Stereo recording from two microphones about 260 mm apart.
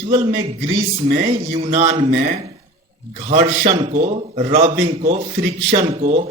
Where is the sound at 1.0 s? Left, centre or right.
Right.